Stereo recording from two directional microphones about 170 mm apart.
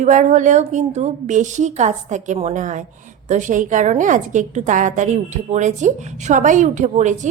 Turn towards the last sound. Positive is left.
turn(degrees=-45)  # may be behind; listen again after turning